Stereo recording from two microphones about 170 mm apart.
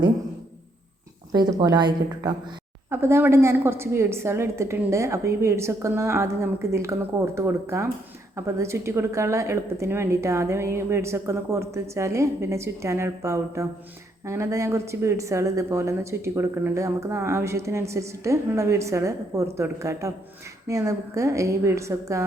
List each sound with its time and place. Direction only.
1.3 s speech: 25° right (ahead or behind)
2.9 s a woman's voice: 15° right (ahead or behind)